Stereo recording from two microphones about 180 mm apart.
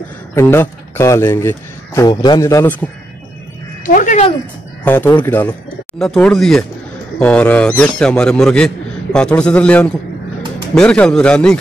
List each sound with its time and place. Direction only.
0.3 s speech: 10° left (ahead or behind)
3.8 s speech: 45° left (ahead or behind)
4.8 s a man's voice: 10° left (ahead or behind)